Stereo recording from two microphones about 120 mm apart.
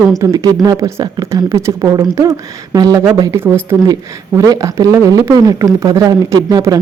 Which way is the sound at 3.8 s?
30° right (ahead or behind).